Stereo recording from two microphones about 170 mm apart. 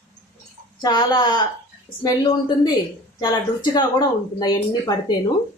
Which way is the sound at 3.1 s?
25° left (ahead or behind).